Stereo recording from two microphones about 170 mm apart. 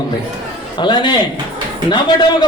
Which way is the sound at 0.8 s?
25° left (ahead or behind).